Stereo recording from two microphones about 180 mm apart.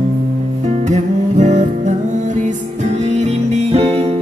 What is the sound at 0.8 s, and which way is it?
Music, 40° right (ahead or behind).